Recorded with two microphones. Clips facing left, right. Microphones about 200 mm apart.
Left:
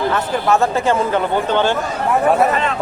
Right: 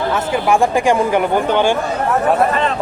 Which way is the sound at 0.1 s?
10° right (ahead or behind).